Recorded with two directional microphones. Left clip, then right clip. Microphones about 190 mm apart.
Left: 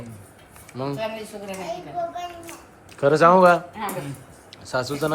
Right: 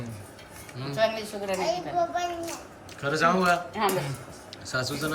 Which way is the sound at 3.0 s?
25° left (ahead or behind).